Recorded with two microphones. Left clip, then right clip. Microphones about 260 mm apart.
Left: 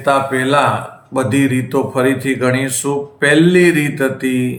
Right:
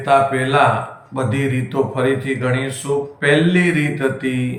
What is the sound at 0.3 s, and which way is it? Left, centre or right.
Speech, left.